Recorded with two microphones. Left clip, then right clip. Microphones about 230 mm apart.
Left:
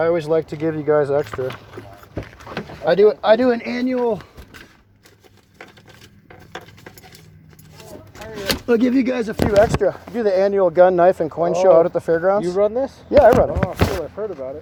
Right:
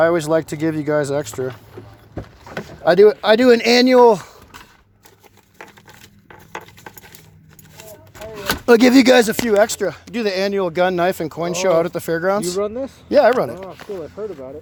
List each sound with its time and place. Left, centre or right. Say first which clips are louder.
0.0 s speech: right 2 dB; right
2.8 s speech: right 2 dB; right
8.6 s speech: right 8 dB; right
9.5 s speech: left 1 dB; right
12.6 s speech: left 5 dB; right
13.1 s speech: left 2 dB; right
14.2 s speech: left 2 dB; right